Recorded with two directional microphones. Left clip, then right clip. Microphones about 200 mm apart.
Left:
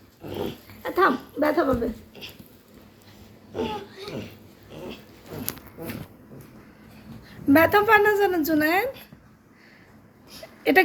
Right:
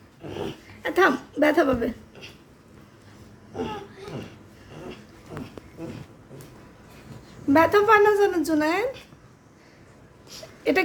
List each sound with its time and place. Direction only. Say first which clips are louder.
0.2 s dog: left 1 dB; 30° right (ahead or behind)
0.8 s a sound: right 1 dB; 20° right (ahead or behind)
7.3 s a woman's voice: left 1 dB; centre (ahead or behind)
10.6 s speech: left 4 dB; centre (ahead or behind)